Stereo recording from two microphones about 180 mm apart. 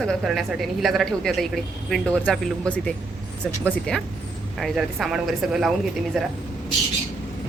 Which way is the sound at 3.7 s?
5° left (ahead or behind).